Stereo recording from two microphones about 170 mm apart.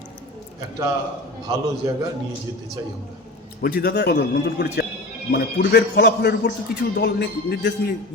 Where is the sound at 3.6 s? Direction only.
55° left (ahead or behind).